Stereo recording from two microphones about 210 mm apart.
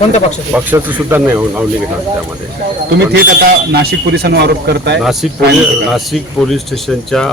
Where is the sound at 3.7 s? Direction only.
50° right (ahead or behind).